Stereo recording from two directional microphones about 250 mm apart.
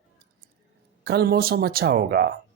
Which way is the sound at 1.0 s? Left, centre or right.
Right.